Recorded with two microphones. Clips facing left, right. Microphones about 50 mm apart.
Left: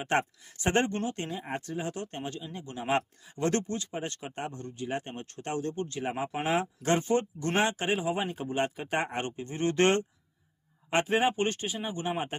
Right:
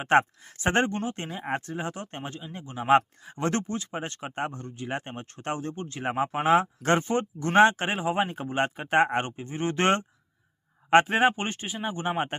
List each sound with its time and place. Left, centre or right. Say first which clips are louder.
0.1 s speech: right 8 dB; right
1.3 s speech: right 4 dB; right
2.9 s speech: right 9 dB; right
3.7 s speech: right 2 dB; right
9.3 s speech: even; centre
11.0 s speech: right 3 dB; right